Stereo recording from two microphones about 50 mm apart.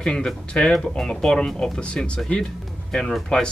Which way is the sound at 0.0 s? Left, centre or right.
Centre.